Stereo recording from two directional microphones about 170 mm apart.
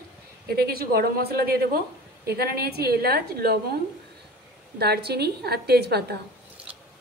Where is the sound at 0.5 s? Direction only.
65° right (ahead or behind).